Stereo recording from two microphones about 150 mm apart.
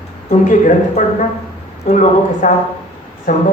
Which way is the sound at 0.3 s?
60° left (ahead or behind).